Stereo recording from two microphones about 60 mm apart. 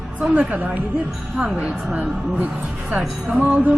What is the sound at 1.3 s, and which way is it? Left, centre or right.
A woman's voice, centre.